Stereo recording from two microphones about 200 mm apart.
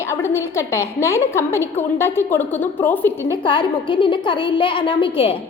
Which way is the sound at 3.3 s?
25° left (ahead or behind).